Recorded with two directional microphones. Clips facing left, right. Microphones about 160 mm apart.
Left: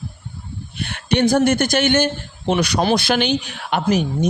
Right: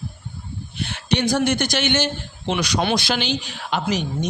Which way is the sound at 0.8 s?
55° left (ahead or behind).